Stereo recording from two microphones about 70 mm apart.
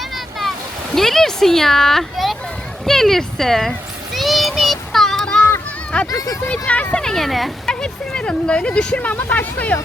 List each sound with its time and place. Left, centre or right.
0.9 s a child's voice: centre
2.8 s a sound: centre
6.1 s speech: left
6.5 s speech: left
7.0 s speech: centre
7.7 s speech: centre